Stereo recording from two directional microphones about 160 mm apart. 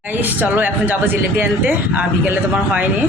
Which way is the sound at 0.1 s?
10° right (ahead or behind).